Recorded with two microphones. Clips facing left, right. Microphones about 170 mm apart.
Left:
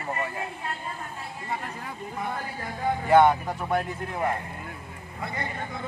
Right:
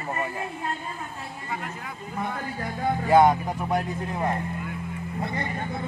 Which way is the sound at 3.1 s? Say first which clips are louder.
Even; 15° right (ahead or behind).